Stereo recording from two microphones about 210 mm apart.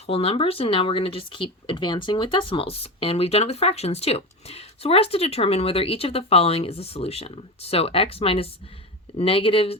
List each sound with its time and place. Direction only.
0.1 s speech: 25° left (ahead or behind)